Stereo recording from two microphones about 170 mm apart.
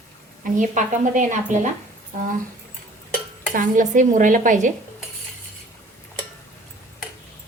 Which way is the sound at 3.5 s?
50° right (ahead or behind).